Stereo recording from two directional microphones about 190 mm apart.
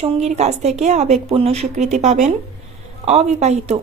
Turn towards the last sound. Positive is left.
turn(degrees=-35)  # may be behind; listen again after turning